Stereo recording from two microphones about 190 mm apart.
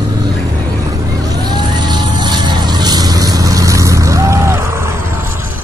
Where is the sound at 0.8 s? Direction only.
20° right (ahead or behind).